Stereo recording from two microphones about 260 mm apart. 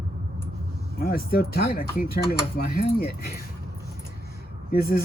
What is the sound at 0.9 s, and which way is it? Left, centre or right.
Speech, left.